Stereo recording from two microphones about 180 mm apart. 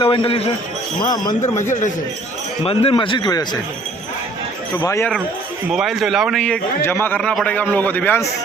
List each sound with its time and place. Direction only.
0.0 s a man's voice: 30° left (ahead or behind)
2.6 s a man's voice: 30° left (ahead or behind)
4.8 s a man's voice: 15° left (ahead or behind)
5.7 s a man's voice: centre (ahead or behind)